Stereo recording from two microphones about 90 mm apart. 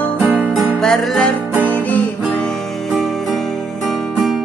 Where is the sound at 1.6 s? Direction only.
20° left (ahead or behind).